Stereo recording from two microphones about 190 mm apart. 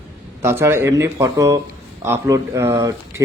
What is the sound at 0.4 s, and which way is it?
Speech, 10° right (ahead or behind).